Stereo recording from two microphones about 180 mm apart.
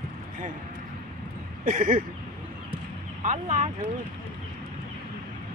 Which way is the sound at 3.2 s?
45° right (ahead or behind).